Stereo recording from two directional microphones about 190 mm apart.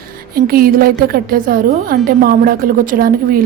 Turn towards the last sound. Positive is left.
turn(degrees=-50)  # may be behind; listen again after turning